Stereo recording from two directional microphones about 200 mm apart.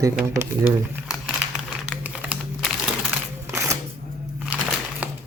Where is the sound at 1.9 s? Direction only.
5° right (ahead or behind).